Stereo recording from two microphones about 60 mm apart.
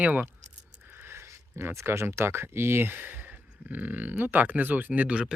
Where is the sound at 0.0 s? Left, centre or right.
Right.